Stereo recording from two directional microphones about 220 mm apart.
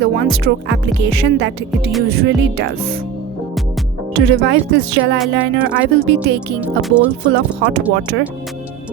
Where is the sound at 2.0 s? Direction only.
45° right (ahead or behind).